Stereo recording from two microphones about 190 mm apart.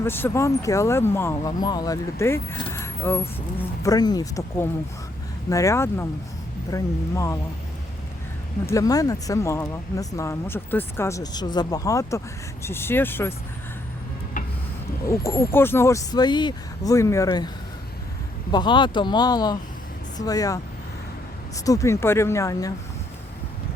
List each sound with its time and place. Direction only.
0.0 s speech: 10° left (ahead or behind)
8.6 s speech: 15° left (ahead or behind)
14.4 s a sound: 45° left (ahead or behind)
15.0 s speech: 15° left (ahead or behind)
18.5 s speech: 25° left (ahead or behind)